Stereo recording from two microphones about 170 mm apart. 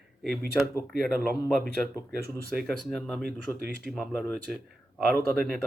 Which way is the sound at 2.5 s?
Centre (ahead or behind).